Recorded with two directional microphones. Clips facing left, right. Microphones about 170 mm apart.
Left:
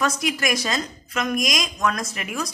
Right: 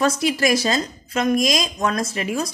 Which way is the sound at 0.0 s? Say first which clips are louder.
Right 5 dB; 30° right (ahead or behind).